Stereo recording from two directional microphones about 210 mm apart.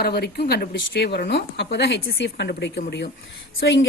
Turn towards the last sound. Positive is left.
turn(degrees=55)  # may be behind; listen again after turning